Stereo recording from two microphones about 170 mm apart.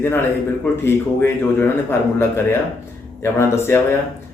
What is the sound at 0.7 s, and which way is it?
A man's voice, 15° left (ahead or behind).